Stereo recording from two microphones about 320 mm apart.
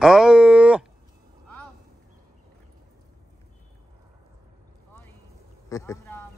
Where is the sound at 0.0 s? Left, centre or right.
Centre.